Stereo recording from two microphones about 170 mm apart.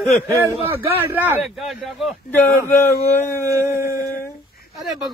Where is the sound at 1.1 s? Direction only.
5° right (ahead or behind).